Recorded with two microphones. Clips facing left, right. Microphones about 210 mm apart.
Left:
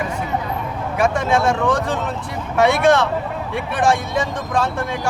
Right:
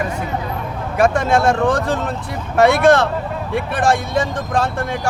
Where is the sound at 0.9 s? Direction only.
35° right (ahead or behind).